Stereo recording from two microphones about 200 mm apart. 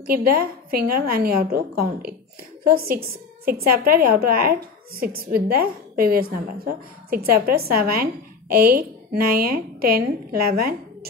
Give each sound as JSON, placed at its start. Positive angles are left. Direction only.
{"t": 0.0, "sound": "a woman's voice", "side_deg": -50}
{"t": 3.4, "sound": "a woman's voice", "side_deg": -50}